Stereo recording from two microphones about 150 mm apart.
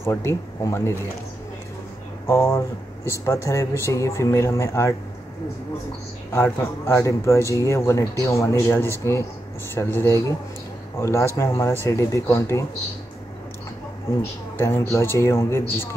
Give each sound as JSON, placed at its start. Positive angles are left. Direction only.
{"t": 0.0, "sound": "speech", "side_deg": 15}
{"t": 2.2, "sound": "speech", "side_deg": 15}
{"t": 6.3, "sound": "speech", "side_deg": 15}
{"t": 9.9, "sound": "speech", "side_deg": 15}
{"t": 14.6, "sound": "speech", "side_deg": 15}